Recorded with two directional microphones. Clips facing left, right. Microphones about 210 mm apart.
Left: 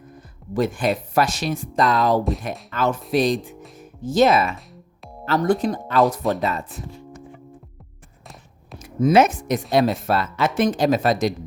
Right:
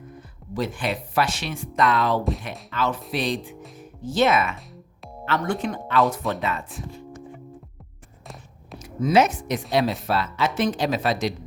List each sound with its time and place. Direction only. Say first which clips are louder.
0.5 s speech: left 5 dB; 50° left (ahead or behind)
8.8 s speech: left 3 dB; 50° left (ahead or behind)